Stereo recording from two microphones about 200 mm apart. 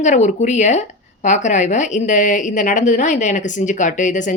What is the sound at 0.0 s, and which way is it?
Speech, 35° left (ahead or behind).